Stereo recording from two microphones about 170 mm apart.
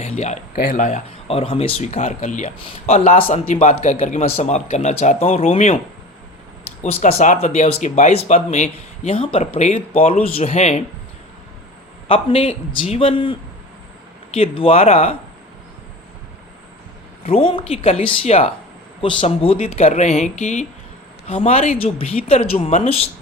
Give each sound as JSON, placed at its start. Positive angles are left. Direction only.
{"t": 0.5, "sound": "speech", "side_deg": 60}
{"t": 7.0, "sound": "speech", "side_deg": 45}
{"t": 12.0, "sound": "speech", "side_deg": 35}
{"t": 14.3, "sound": "speech", "side_deg": 35}
{"t": 17.2, "sound": "speech", "side_deg": 35}